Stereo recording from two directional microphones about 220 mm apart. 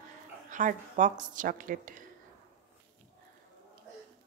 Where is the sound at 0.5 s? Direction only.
35° right (ahead or behind).